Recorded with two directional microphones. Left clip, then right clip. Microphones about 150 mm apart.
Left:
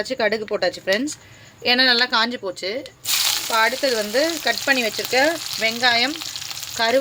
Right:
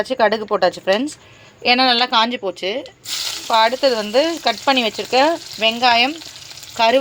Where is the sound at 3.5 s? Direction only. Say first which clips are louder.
Right 6 dB; 25° right (ahead or behind).